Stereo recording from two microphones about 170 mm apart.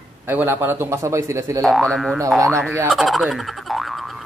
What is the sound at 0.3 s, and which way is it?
Speech, 10° right (ahead or behind).